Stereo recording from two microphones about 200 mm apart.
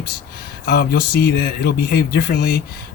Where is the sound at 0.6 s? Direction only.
55° left (ahead or behind).